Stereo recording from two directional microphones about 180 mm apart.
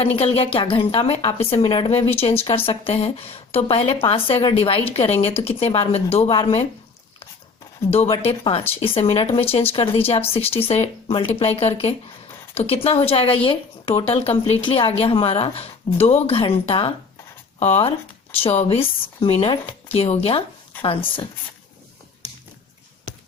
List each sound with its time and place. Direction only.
0.0 s speech: 35° left (ahead or behind)
7.9 s speech: 35° left (ahead or behind)
22.2 s a sound: 20° right (ahead or behind)